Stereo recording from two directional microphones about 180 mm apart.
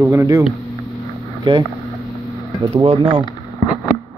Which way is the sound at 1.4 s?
25° right (ahead or behind).